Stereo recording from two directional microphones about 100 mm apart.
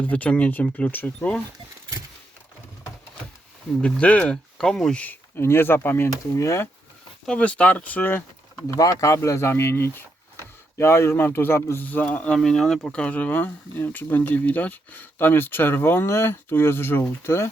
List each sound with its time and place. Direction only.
0.0 s speech: 15° left (ahead or behind)
3.8 s speech: 10° left (ahead or behind)
5.4 s speech: 25° left (ahead or behind)
7.3 s speech: 10° left (ahead or behind)
8.6 s speech: 35° left (ahead or behind)
10.4 s a sound: 25° left (ahead or behind)
11.2 s speech: 20° left (ahead or behind)